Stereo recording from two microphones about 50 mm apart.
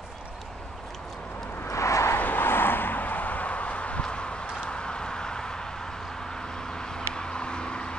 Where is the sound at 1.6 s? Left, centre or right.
Left.